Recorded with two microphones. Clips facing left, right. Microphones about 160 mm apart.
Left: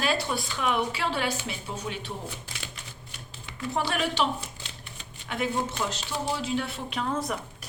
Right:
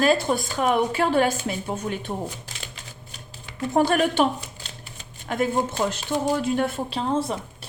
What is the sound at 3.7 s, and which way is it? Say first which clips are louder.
Speech: right 8 dB; 50° right (ahead or behind).